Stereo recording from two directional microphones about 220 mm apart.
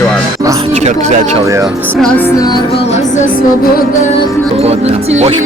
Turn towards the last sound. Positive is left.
turn(degrees=-30)  # may be behind; listen again after turning